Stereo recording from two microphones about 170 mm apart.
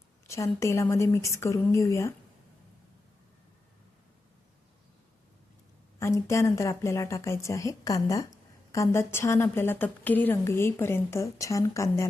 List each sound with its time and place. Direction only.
0.3 s a woman's voice: 15° left (ahead or behind)
6.0 s a woman's voice: 15° left (ahead or behind)